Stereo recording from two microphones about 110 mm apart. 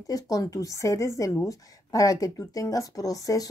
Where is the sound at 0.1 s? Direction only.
30° left (ahead or behind).